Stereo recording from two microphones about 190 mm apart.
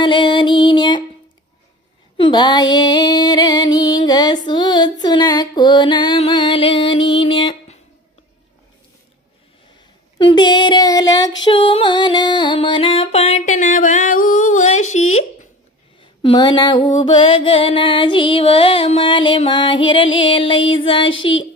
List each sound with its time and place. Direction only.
0.0 s music: 25° left (ahead or behind)
2.1 s music: 25° left (ahead or behind)
10.2 s child singing: 25° left (ahead or behind)
11.4 s music: 25° left (ahead or behind)
16.2 s mantra: 25° left (ahead or behind)